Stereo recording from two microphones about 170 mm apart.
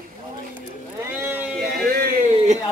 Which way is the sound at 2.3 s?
45° right (ahead or behind).